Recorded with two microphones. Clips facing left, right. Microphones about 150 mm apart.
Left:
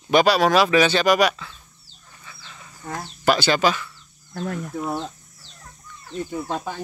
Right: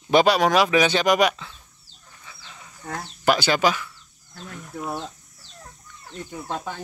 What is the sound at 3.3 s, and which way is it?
Speech, 10° right (ahead or behind).